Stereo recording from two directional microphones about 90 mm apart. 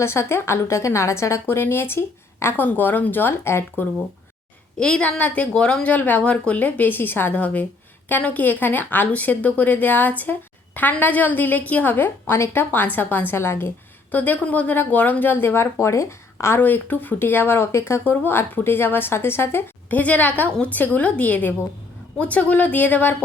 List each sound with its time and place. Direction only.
0.0 s a woman's voice: 30° left (ahead or behind)
4.8 s a woman's voice: 10° left (ahead or behind)